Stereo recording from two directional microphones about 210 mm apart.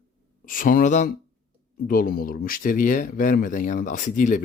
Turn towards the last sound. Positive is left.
turn(degrees=35)  # may be behind; listen again after turning